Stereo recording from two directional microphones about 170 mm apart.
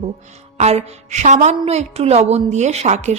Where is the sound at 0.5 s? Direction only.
40° right (ahead or behind).